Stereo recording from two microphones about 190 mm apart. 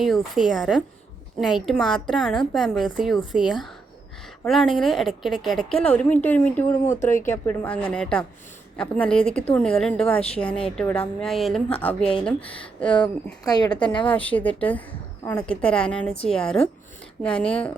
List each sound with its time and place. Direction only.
0.0 s speech: centre (ahead or behind)
7.0 s speech: 40° left (ahead or behind)
7.4 s speech: 10° left (ahead or behind)
13.4 s a woman's voice: 20° left (ahead or behind)
14.1 s a woman's voice: 10° left (ahead or behind)
16.1 s speech: 30° left (ahead or behind)
16.4 s speech: 5° left (ahead or behind)